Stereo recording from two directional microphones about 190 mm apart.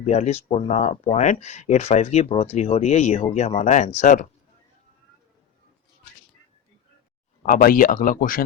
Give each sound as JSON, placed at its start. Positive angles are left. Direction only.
{"t": 0.0, "sound": "speech", "side_deg": 35}
{"t": 7.4, "sound": "speech", "side_deg": 45}